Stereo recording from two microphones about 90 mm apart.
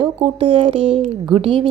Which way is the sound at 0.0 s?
80° right.